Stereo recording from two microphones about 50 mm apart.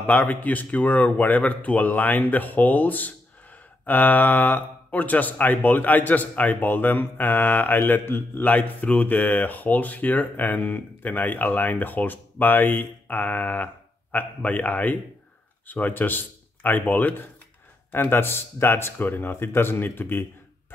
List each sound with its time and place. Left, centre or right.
0.0 s speech: left
8.5 s a man's voice: left
17.9 s speech: left